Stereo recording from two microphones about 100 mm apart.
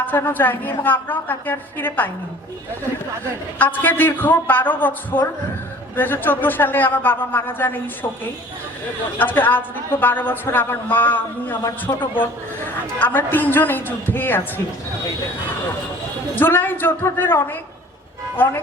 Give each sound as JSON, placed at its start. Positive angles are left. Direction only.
{"t": 0.0, "sound": "a woman's voice", "side_deg": 20}
{"t": 3.6, "sound": "a woman's voice", "side_deg": 20}
{"t": 9.1, "sound": "a woman's voice", "side_deg": 20}
{"t": 16.3, "sound": "a woman's voice", "side_deg": 20}